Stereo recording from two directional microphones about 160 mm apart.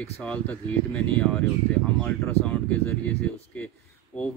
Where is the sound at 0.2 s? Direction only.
10° left (ahead or behind).